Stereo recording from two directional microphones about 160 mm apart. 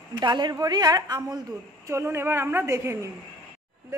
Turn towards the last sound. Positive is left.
turn(degrees=-15)  # may be behind; listen again after turning